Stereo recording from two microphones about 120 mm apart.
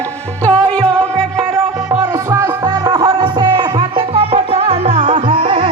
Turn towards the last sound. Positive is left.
turn(degrees=-50)  # may be behind; listen again after turning